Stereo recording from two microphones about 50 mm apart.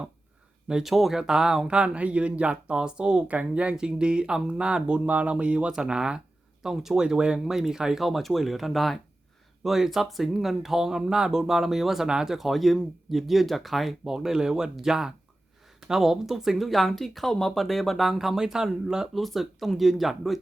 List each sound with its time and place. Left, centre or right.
0.7 s speech: centre
19.1 s speech: centre